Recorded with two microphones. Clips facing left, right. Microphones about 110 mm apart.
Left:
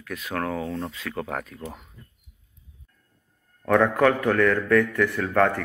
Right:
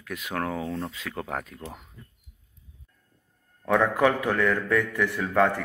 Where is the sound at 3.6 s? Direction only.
5° right (ahead or behind).